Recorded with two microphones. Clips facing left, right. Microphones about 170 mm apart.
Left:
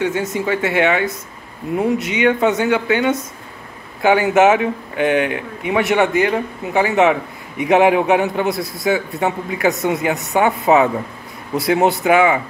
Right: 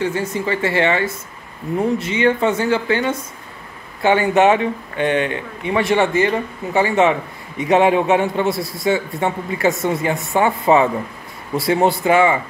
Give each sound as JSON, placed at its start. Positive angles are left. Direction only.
{"t": 0.0, "sound": "a man's voice", "side_deg": 0}